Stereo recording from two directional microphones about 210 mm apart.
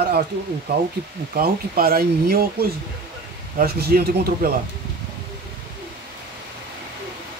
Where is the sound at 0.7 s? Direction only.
50° right (ahead or behind).